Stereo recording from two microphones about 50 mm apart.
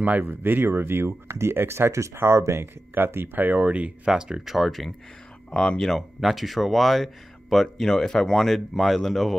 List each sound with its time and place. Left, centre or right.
0.2 s speech: right
2.6 s speech: right
4.1 s speech: centre
4.6 s speech: centre
5.5 s speech: centre